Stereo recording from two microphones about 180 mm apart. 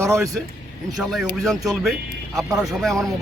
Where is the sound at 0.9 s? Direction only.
Centre (ahead or behind).